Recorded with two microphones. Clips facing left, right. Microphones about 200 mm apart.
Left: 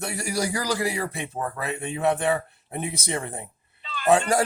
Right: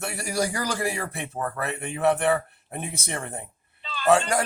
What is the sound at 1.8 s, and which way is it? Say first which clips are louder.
Speech: right 1 dB; 20° left (ahead or behind).